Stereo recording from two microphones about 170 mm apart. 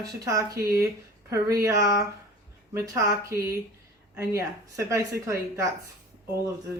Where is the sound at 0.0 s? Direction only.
20° right (ahead or behind).